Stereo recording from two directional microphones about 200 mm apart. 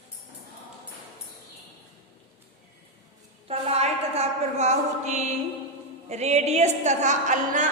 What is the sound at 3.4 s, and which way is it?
A woman's voice, 30° right (ahead or behind).